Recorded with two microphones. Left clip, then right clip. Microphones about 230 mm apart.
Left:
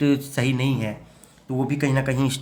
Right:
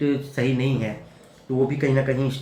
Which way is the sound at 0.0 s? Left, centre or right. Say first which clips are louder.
Left 1 dB; left.